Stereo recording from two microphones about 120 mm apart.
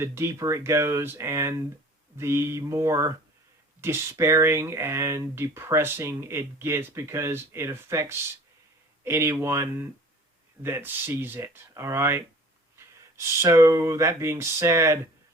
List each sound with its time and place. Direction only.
0.0 s speech: 20° right (ahead or behind)